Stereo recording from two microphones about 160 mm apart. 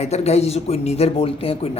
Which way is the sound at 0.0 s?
40° left (ahead or behind).